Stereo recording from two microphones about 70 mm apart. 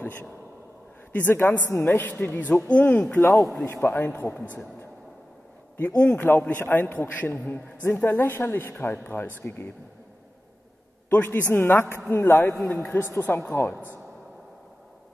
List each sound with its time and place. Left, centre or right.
0.0 s a woman's voice: left
3.2 s a man's voice: left
3.6 s a woman's voice: left
5.8 s a man's voice: left
11.1 s a woman's voice: left
13.5 s a man's voice: left